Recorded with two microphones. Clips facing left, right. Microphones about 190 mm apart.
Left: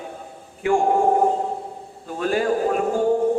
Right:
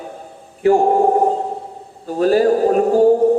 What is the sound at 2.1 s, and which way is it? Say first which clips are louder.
Speech: right 7 dB; 40° right (ahead or behind).